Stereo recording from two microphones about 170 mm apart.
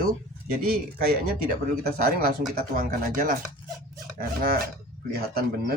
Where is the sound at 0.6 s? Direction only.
60° right (ahead or behind).